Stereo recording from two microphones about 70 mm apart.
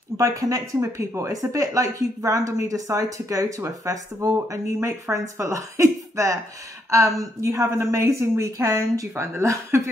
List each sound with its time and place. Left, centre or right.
0.2 s speech: right
9.1 s speech: right